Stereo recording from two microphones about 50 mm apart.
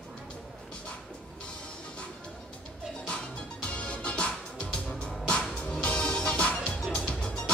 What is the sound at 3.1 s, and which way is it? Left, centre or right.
Music, left.